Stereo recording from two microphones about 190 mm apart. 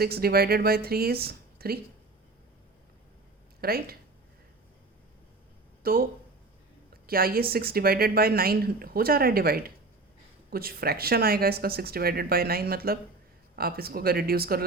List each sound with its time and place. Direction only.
0.0 s speech: 55° right (ahead or behind)
3.6 s speech: 50° right (ahead or behind)
5.8 s speech: 50° right (ahead or behind)
7.1 s speech: 50° right (ahead or behind)